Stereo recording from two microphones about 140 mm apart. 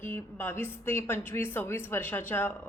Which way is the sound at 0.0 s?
15° left (ahead or behind).